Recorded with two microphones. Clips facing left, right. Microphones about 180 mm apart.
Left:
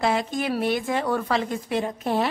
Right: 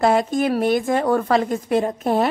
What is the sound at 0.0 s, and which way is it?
A woman's voice, 45° right (ahead or behind).